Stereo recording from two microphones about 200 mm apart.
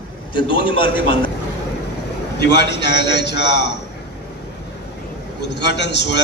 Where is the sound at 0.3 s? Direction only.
25° left (ahead or behind).